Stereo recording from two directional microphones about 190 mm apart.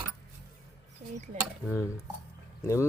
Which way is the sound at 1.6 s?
15° left (ahead or behind).